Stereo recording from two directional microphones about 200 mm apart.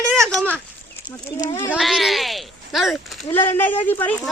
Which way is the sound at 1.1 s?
15° left (ahead or behind).